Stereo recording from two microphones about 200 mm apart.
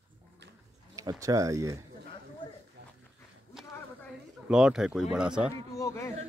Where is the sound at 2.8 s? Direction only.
60° right (ahead or behind).